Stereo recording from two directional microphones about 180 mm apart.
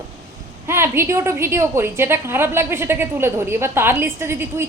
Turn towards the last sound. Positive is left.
turn(degrees=-15)  # may be behind; listen again after turning